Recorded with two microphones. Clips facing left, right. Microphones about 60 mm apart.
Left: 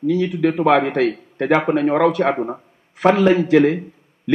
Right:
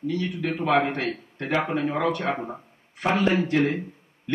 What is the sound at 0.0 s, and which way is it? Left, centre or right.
Speech, left.